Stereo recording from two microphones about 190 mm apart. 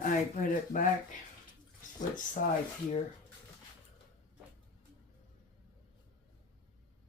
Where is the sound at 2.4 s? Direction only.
45° left (ahead or behind).